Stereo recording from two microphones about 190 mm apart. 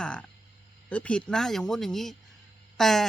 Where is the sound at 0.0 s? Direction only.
5° left (ahead or behind).